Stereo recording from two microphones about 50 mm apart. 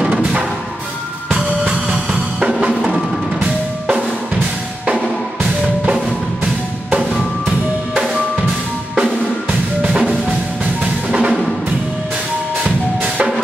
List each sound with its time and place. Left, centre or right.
1.3 s drum: centre
2.7 s percussion: centre
6.4 s percussion: right
9.5 s drum: right
11.1 s music: centre
12.6 s percussion: right